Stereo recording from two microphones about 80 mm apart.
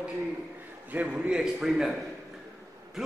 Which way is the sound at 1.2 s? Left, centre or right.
Centre.